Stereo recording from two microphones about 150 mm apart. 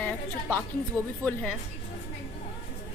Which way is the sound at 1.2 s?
10° left (ahead or behind).